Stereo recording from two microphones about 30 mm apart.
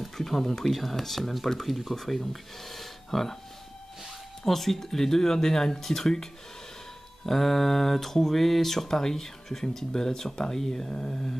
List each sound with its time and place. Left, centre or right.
0.2 s speech: centre
2.7 s a sound: centre
4.5 s speech: centre
7.2 s speech: centre